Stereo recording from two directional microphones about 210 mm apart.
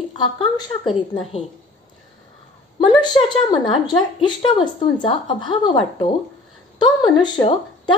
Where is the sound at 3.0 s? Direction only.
20° left (ahead or behind).